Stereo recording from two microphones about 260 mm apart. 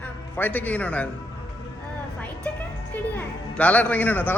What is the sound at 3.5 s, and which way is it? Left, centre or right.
Speech, centre.